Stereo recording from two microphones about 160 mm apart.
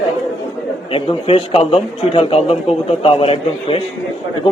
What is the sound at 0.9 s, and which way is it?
A man's voice, 35° left (ahead or behind).